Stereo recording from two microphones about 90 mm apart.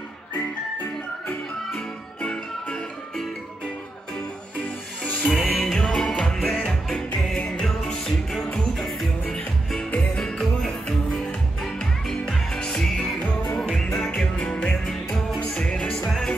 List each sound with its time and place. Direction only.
2.2 s music: 5° left (ahead or behind)
5.2 s music: centre (ahead or behind)